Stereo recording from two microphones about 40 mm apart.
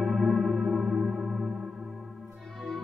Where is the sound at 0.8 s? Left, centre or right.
Centre.